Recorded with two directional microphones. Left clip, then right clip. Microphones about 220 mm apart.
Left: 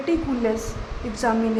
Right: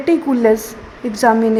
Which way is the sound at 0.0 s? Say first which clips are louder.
Right 9 dB; 30° right (ahead or behind).